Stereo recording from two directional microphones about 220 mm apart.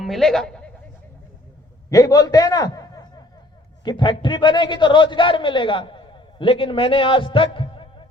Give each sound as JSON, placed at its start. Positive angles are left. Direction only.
{"t": 0.0, "sound": "speech", "side_deg": 0}
{"t": 1.9, "sound": "a man's voice", "side_deg": 15}